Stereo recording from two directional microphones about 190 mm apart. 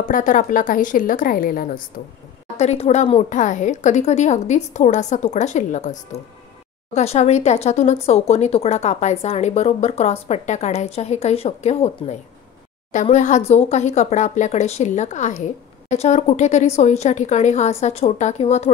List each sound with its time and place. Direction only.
0.1 s speech: 45° left (ahead or behind)
2.5 s speech: 35° left (ahead or behind)